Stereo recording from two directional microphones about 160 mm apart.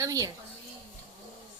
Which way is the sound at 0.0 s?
20° right (ahead or behind).